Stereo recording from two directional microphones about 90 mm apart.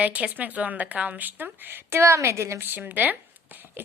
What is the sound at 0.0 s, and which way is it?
Speech, 15° right (ahead or behind).